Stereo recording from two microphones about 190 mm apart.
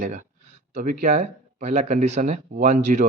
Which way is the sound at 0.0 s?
40° right (ahead or behind).